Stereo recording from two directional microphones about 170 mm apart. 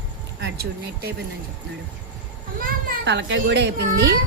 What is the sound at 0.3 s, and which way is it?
Speech, 80° right.